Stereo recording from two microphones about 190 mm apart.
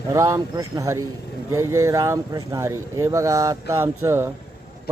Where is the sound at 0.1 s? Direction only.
20° right (ahead or behind).